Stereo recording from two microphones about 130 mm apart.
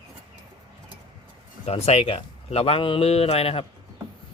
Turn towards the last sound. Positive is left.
turn(degrees=50)  # may be behind; listen again after turning